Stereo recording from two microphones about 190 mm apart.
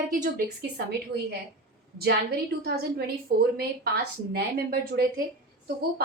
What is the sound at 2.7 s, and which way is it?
A woman's voice, 55° right (ahead or behind).